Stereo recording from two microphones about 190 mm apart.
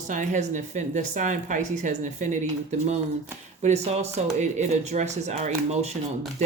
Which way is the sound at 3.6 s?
35° right (ahead or behind).